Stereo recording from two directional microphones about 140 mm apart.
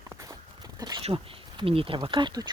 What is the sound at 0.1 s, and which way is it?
Walk, 25° right (ahead or behind).